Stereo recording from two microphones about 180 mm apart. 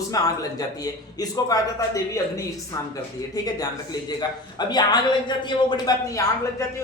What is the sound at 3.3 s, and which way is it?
Speech, 20° left (ahead or behind).